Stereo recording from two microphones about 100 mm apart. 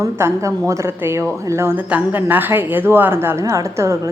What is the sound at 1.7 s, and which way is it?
A woman's voice, 15° right (ahead or behind).